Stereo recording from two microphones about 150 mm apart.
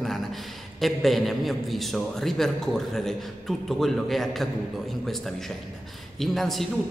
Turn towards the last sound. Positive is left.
turn(degrees=0)  # may be behind; listen again after turning